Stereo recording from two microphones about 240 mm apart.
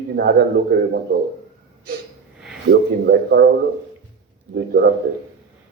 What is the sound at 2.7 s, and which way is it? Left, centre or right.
Speech, right.